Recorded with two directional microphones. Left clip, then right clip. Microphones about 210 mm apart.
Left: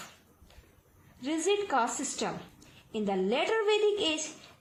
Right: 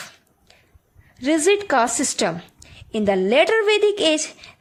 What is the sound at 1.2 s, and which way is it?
A woman's voice, 50° right (ahead or behind).